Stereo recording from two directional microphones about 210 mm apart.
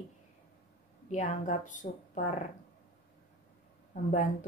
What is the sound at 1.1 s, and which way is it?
A woman's voice, 35° left (ahead or behind).